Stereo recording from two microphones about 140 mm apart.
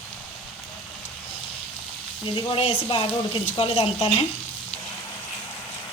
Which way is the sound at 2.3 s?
40° left (ahead or behind).